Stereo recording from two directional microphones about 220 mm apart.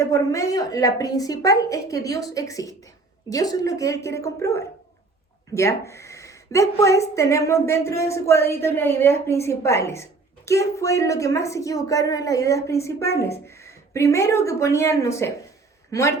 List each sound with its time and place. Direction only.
0.0 s speech: 15° left (ahead or behind)